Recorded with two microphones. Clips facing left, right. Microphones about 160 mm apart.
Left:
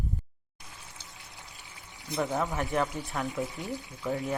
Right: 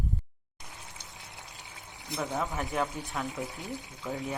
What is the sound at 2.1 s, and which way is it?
Speech, centre (ahead or behind).